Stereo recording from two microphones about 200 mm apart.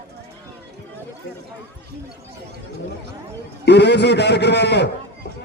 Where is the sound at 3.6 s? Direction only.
60° left (ahead or behind).